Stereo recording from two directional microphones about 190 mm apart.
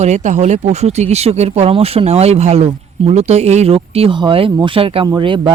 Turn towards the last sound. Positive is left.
turn(degrees=-25)  # may be behind; listen again after turning